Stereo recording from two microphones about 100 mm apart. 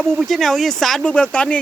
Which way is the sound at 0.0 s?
Centre (ahead or behind).